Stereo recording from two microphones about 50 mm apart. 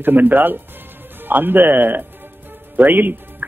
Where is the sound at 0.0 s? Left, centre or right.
Right.